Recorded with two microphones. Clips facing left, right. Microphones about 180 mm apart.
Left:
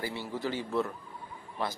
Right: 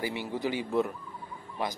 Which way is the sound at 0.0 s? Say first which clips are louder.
Right 3 dB; 15° right (ahead or behind).